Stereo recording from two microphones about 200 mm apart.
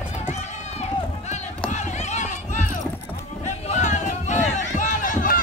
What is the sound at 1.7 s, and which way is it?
Run, 35° left (ahead or behind).